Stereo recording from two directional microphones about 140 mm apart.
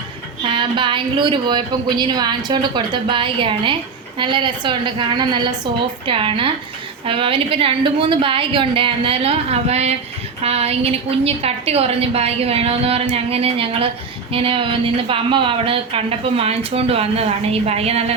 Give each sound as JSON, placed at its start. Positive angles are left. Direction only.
{"t": 0.4, "sound": "a woman's voice", "side_deg": -35}